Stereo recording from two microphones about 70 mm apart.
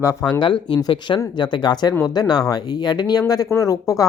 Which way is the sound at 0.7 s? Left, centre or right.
Left.